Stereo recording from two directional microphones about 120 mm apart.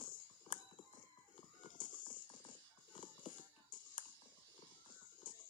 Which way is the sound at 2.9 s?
40° left (ahead or behind).